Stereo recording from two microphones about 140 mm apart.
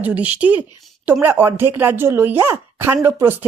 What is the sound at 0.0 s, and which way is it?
A woman's voice, 10° right (ahead or behind).